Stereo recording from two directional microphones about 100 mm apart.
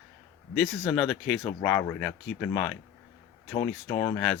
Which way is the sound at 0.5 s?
Centre (ahead or behind).